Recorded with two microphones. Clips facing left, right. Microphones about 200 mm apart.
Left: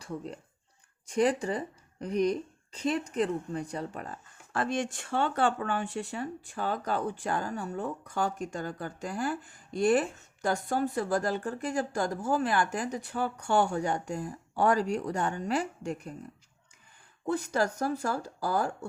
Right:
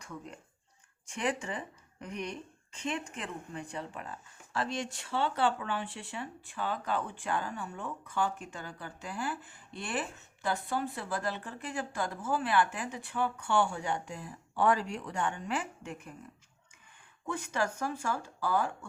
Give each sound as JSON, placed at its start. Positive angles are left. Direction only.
{"t": 0.0, "sound": "a woman's voice", "side_deg": 35}
{"t": 17.2, "sound": "a woman's voice", "side_deg": 35}